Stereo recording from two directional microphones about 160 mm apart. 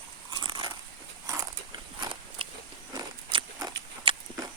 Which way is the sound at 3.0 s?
25° right (ahead or behind).